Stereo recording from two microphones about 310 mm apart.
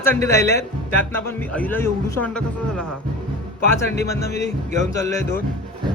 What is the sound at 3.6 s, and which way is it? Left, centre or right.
Speech, left.